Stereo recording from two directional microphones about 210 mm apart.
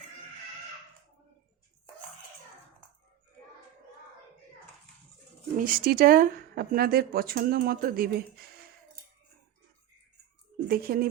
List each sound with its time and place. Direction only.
5.5 s speech: 45° right (ahead or behind)
10.7 s speech: 45° right (ahead or behind)